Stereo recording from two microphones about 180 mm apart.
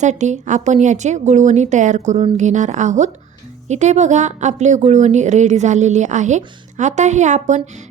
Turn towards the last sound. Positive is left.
turn(degrees=-40)  # may be behind; listen again after turning